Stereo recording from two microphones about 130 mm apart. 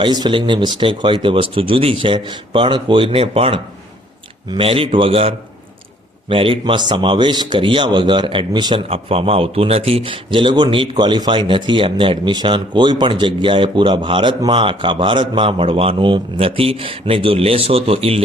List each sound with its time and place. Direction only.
0.0 s a man's voice: 35° right (ahead or behind)
8.9 s speech: 50° right (ahead or behind)